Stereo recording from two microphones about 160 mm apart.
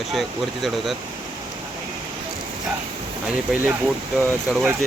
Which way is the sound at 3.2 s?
10° right (ahead or behind).